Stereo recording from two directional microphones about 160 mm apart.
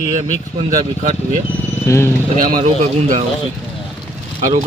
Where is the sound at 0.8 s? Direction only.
50° right (ahead or behind).